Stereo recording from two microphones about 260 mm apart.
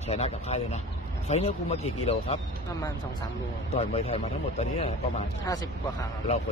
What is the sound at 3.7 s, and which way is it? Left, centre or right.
Speech, left.